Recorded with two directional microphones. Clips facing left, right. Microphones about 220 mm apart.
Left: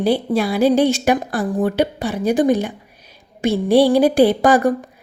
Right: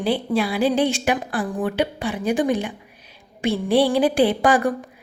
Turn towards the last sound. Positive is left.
turn(degrees=40)  # may be behind; listen again after turning